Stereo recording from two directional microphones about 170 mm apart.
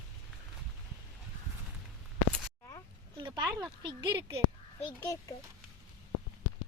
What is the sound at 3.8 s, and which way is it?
Speech, 25° right (ahead or behind).